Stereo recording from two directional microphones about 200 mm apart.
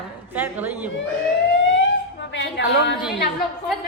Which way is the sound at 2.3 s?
65° left (ahead or behind).